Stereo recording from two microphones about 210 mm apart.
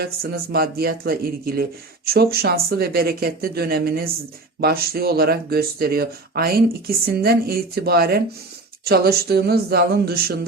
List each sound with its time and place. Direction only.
0.0 s speech: 45° right (ahead or behind)